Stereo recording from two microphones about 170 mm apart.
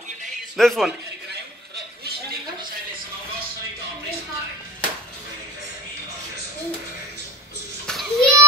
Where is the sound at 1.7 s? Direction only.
70° right (ahead or behind).